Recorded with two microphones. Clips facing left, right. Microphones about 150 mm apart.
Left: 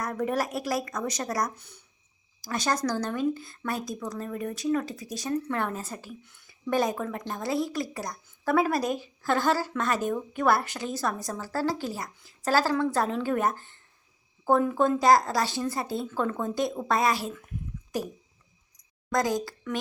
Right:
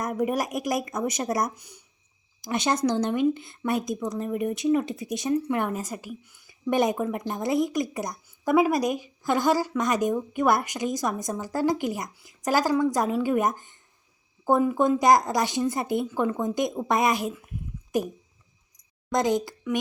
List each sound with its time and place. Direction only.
0.0 s a woman's voice: 15° right (ahead or behind)
19.1 s speech: 20° right (ahead or behind)